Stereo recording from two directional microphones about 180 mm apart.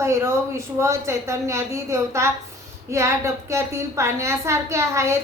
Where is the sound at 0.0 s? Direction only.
15° right (ahead or behind).